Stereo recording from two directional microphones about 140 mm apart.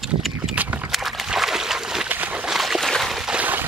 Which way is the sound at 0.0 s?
Centre (ahead or behind).